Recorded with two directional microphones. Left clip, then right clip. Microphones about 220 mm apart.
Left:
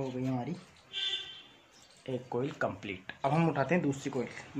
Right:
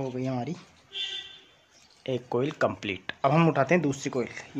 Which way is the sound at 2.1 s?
45° right (ahead or behind).